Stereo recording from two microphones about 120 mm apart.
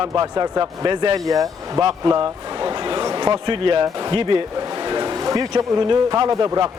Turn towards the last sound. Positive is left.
turn(degrees=-30)  # may be behind; listen again after turning